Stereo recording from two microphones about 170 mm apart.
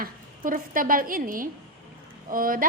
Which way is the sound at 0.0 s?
55° right (ahead or behind).